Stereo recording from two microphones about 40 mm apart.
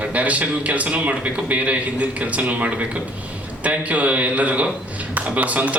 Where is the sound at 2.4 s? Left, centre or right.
Right.